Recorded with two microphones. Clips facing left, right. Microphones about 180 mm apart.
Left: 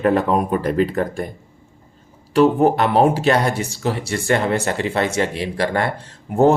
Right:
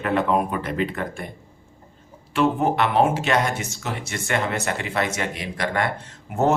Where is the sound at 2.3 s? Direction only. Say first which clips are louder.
Left 6 dB; 35° left (ahead or behind).